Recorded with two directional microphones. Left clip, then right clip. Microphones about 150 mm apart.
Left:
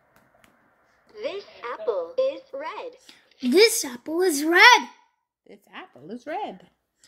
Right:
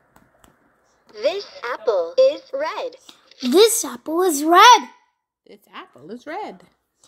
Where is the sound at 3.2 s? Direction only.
60° right (ahead or behind).